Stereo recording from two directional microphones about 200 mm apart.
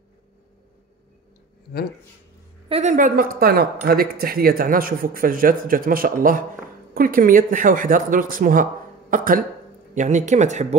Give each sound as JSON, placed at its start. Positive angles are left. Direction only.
{"t": 2.7, "sound": "speech", "side_deg": -35}